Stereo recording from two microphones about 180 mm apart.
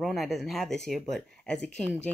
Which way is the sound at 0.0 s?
Centre (ahead or behind).